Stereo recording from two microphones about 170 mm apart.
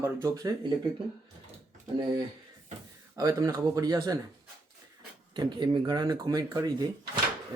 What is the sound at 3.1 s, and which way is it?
Speech, 20° right (ahead or behind).